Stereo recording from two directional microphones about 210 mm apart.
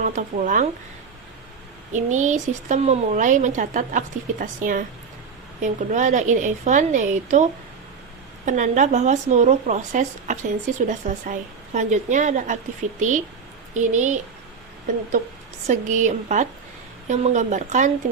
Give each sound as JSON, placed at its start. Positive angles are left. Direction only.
{"t": 0.0, "sound": "speech", "side_deg": -35}
{"t": 1.9, "sound": "speech", "side_deg": -35}
{"t": 8.4, "sound": "a woman's voice", "side_deg": -35}